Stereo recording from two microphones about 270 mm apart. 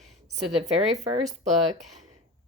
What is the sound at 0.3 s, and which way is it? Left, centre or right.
Speech, right.